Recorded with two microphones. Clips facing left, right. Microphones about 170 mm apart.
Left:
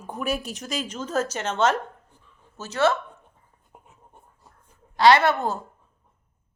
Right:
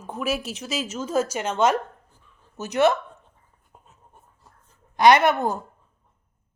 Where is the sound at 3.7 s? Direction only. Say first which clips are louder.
Left 2 dB; 15° left (ahead or behind).